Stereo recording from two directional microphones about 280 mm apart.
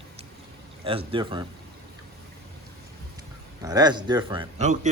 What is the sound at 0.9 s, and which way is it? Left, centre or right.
Speech, centre.